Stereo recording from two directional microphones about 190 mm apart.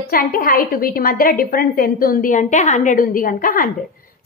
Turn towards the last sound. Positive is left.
turn(degrees=50)  # may be behind; listen again after turning